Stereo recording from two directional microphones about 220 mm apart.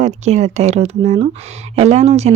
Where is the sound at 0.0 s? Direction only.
30° right (ahead or behind).